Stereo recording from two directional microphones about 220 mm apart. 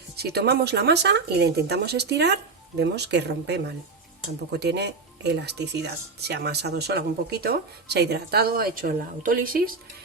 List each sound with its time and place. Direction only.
0.2 s speech: 45° right (ahead or behind)